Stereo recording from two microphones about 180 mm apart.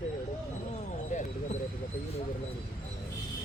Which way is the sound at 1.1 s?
40° left (ahead or behind).